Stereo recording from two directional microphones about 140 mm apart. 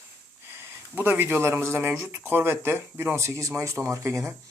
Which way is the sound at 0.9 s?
15° right (ahead or behind).